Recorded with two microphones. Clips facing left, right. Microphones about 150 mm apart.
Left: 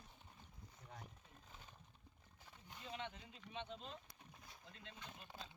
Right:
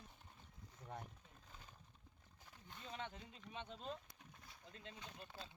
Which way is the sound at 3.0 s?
40° right (ahead or behind).